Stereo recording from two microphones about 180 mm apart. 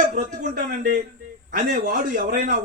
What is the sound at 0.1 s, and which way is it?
A man's voice, 50° right (ahead or behind).